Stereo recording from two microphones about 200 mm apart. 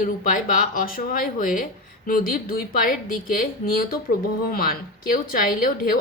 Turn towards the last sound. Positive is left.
turn(degrees=45)  # may be behind; listen again after turning